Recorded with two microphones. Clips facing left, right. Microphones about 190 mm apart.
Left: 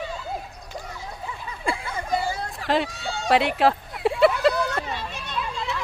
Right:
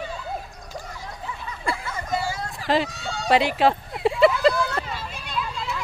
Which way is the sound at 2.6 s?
Centre (ahead or behind).